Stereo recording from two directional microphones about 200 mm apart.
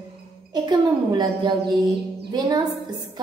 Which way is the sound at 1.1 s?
20° right (ahead or behind).